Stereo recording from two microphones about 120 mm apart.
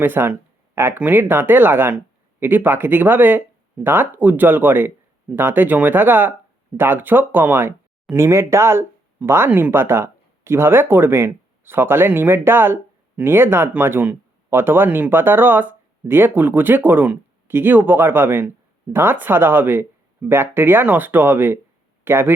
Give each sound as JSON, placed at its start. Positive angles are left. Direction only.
{"t": 0.0, "sound": "speech", "side_deg": -15}